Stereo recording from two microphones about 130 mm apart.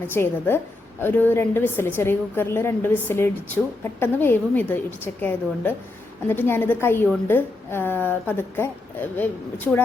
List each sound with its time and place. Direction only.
0.1 s a woman's voice: 15° left (ahead or behind)